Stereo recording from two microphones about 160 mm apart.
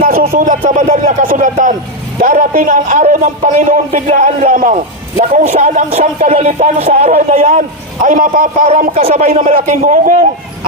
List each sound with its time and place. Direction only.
0.0 s a man's voice: 65° right (ahead or behind)